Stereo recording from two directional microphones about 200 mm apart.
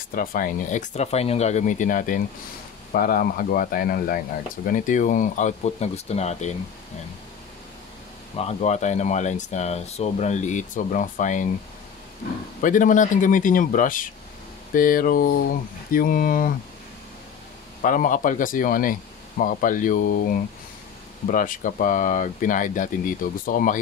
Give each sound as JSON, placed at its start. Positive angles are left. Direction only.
{"t": 0.1, "sound": "speech", "side_deg": 45}
{"t": 8.4, "sound": "speech", "side_deg": 35}
{"t": 12.6, "sound": "speech", "side_deg": 40}
{"t": 17.8, "sound": "speech", "side_deg": 40}